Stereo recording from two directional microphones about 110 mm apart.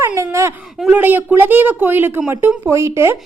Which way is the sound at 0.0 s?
25° right (ahead or behind).